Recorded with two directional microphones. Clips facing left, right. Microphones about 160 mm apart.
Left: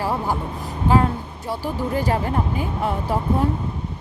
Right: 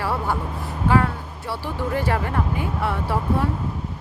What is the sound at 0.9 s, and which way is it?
Speech, 25° left (ahead or behind).